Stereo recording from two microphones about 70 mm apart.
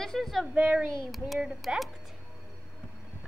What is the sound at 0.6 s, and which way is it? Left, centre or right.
Speech, centre.